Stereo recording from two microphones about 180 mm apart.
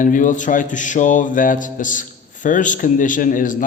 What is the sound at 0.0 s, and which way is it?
Speech, 45° left (ahead or behind).